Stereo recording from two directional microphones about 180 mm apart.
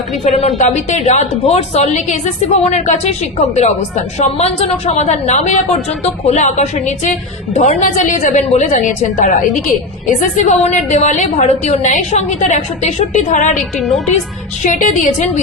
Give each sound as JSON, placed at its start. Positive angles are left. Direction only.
{"t": 0.3, "sound": "a woman's voice", "side_deg": 40}
{"t": 13.7, "sound": "a woman's voice", "side_deg": 0}
{"t": 14.6, "sound": "a woman's voice", "side_deg": 45}